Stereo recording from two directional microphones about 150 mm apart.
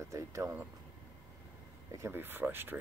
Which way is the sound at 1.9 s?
15° right (ahead or behind).